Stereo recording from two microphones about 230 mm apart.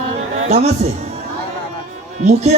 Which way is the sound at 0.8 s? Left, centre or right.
Right.